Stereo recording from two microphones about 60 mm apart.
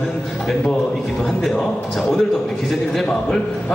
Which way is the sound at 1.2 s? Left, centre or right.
Centre.